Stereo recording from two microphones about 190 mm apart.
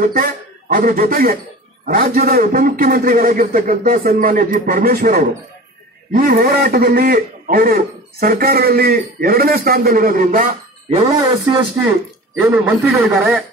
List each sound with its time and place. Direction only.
0.0 s a man's voice: 45° right (ahead or behind)
11.1 s speech: 20° right (ahead or behind)
12.4 s speech: 5° right (ahead or behind)